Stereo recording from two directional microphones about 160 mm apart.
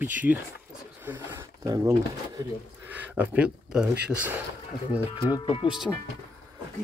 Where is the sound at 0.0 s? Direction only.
10° right (ahead or behind).